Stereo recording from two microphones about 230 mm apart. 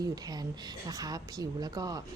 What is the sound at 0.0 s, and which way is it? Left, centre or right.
Speech, centre.